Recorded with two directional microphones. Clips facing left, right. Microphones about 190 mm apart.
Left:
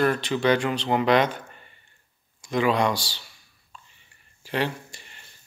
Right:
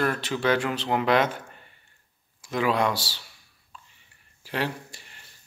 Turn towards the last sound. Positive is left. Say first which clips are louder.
# even
turn(degrees=0)  # may be behind; listen again after turning